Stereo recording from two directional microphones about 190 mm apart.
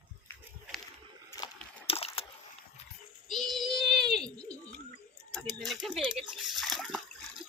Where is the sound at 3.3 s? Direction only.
Centre (ahead or behind).